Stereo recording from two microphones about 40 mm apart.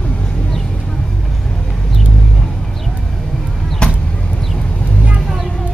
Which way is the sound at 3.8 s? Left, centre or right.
Left.